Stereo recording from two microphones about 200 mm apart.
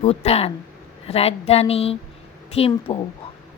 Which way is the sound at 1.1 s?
30° left (ahead or behind).